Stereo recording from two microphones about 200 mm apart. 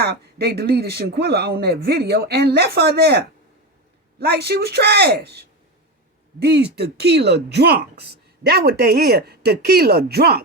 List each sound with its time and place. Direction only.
0.0 s speech: 55° right (ahead or behind)